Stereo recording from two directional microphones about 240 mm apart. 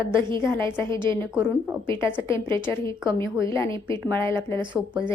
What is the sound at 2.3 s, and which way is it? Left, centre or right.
Speech, centre.